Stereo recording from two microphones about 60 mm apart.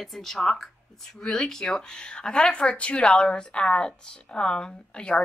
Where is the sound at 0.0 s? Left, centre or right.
Centre.